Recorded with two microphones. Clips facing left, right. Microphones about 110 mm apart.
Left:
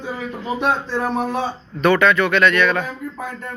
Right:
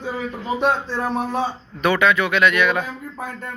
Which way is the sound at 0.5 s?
15° left (ahead or behind).